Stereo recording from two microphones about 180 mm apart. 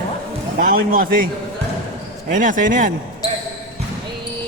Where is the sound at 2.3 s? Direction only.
45° right (ahead or behind).